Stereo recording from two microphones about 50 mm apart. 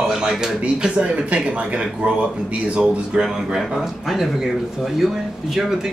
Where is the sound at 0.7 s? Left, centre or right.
Centre.